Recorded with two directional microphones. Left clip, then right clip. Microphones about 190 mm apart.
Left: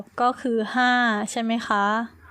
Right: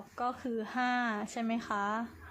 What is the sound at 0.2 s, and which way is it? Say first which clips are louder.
Speech: left 13 dB; 35° left (ahead or behind).